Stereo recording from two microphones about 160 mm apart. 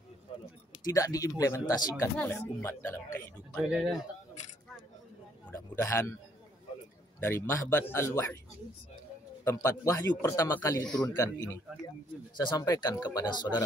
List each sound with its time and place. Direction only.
0.8 s a man's voice: 20° left (ahead or behind)
3.6 s a man's voice: 5° right (ahead or behind)
5.5 s speech: 15° left (ahead or behind)
7.2 s speech: 15° left (ahead or behind)
9.4 s a man's voice: 15° left (ahead or behind)